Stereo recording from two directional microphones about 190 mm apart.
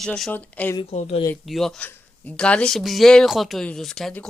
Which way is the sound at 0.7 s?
30° left (ahead or behind).